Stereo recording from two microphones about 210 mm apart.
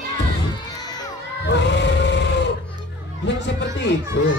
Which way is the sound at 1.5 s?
55° left (ahead or behind).